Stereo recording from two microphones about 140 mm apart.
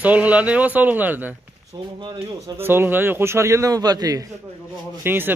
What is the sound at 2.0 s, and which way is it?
Speech, 30° right (ahead or behind).